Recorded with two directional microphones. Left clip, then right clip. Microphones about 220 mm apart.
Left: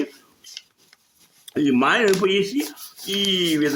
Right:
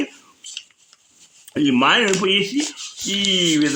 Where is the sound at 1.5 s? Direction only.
45° right (ahead or behind).